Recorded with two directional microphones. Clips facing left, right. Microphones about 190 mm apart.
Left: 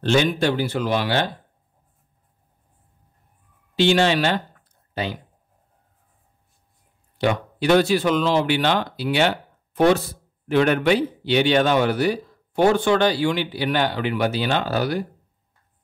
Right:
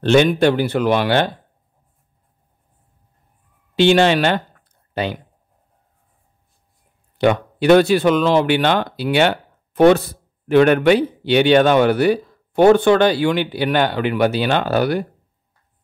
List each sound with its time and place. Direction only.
0.0 s speech: 60° right (ahead or behind)
3.7 s speech: 60° right (ahead or behind)
7.2 s speech: 60° right (ahead or behind)